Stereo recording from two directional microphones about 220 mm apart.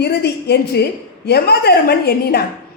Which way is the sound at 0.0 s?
50° left (ahead or behind).